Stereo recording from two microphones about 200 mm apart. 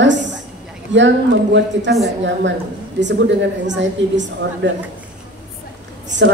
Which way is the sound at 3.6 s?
65° right (ahead or behind).